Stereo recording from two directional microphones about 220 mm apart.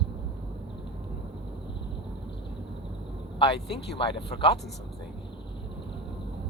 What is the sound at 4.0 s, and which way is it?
Speech, 25° left (ahead or behind).